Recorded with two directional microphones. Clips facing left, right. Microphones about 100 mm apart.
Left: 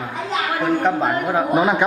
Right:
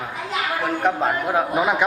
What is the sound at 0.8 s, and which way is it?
Speech, 5° right (ahead or behind).